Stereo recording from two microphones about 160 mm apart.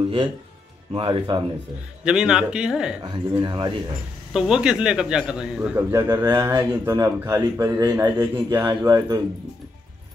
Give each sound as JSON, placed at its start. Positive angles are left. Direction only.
{"t": 0.9, "sound": "speech", "side_deg": -30}
{"t": 2.0, "sound": "speech", "side_deg": -5}
{"t": 3.0, "sound": "speech", "side_deg": -25}
{"t": 4.3, "sound": "a man's voice", "side_deg": -5}